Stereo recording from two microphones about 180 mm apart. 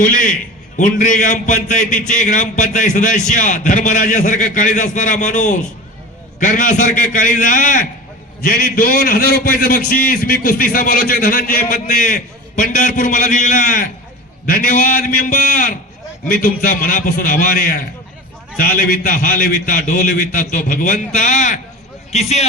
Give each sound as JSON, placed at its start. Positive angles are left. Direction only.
{"t": 0.0, "sound": "a man's voice", "side_deg": 45}